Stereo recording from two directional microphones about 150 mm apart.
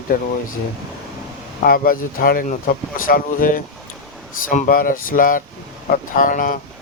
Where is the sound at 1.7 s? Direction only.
75° left (ahead or behind).